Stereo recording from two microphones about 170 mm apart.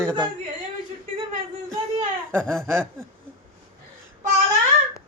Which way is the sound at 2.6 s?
15° right (ahead or behind).